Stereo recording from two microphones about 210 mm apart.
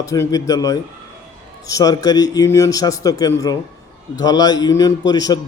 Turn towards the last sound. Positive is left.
turn(degrees=20)  # may be behind; listen again after turning